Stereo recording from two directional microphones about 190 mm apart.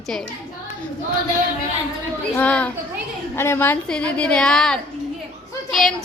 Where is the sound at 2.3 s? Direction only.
5° left (ahead or behind).